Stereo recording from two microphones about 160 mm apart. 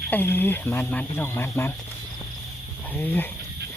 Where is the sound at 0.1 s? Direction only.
10° left (ahead or behind).